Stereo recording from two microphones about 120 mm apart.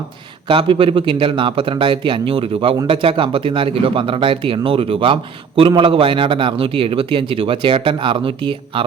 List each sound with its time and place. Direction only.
0.4 s a man's voice: 45° right (ahead or behind)